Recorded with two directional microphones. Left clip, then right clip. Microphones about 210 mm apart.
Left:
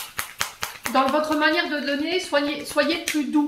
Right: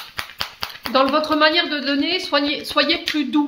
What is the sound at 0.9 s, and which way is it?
Speech, 45° right (ahead or behind).